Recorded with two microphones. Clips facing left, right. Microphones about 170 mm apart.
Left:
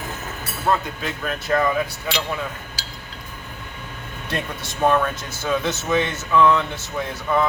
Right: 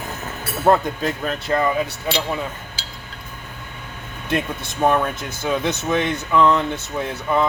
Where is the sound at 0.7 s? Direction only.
50° right (ahead or behind).